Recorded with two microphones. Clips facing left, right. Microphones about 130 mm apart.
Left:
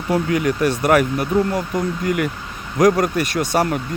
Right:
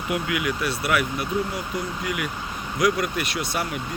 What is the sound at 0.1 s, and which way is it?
Speech, 40° left (ahead or behind).